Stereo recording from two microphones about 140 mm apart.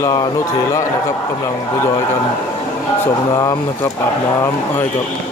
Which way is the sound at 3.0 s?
25° left (ahead or behind).